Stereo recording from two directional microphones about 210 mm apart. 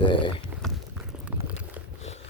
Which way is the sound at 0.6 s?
Centre (ahead or behind).